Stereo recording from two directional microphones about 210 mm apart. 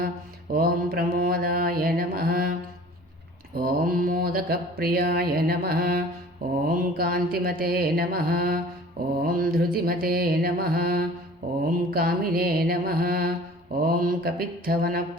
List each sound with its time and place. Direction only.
0.5 s mantra: 45° right (ahead or behind)
3.6 s mantra: 40° right (ahead or behind)